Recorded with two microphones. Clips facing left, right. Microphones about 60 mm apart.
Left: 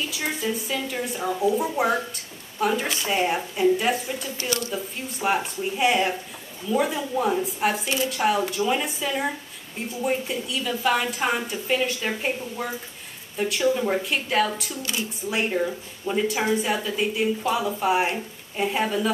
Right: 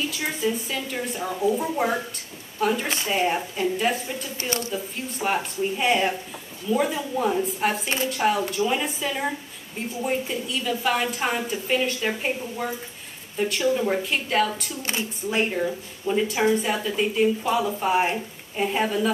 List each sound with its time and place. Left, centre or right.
0.1 s a woman's voice: centre
4.4 s speech: right
4.7 s a woman's voice: centre
14.8 s speech: right
15.2 s a woman's voice: centre